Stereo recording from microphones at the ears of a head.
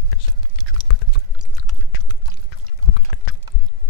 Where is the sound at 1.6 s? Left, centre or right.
Left.